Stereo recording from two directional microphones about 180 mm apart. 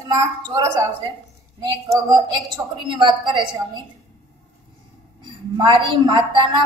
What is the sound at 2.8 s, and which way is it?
Speech, 25° right (ahead or behind).